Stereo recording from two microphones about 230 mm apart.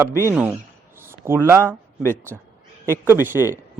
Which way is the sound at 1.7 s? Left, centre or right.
Centre.